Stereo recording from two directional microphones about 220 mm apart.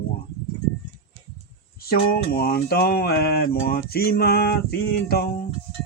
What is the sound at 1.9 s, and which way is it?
Music, 45° left (ahead or behind).